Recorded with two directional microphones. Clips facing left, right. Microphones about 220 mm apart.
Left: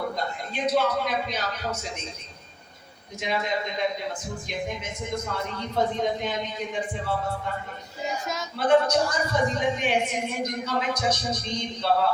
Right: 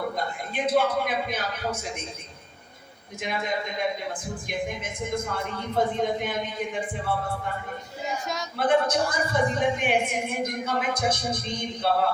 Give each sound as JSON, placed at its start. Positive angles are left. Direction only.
{"t": 0.5, "sound": "speech", "side_deg": -50}
{"t": 3.2, "sound": "speech", "side_deg": -50}
{"t": 8.5, "sound": "speech", "side_deg": -55}